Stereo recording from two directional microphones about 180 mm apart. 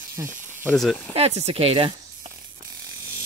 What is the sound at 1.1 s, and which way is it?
Speech, 35° right (ahead or behind).